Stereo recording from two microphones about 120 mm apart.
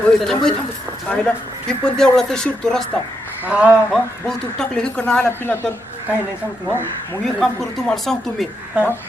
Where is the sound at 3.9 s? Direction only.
5° left (ahead or behind).